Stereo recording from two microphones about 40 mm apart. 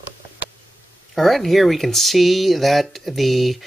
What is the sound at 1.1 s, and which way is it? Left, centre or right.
Speech, centre.